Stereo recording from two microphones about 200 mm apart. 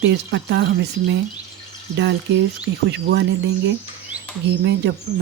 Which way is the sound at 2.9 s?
60° right (ahead or behind).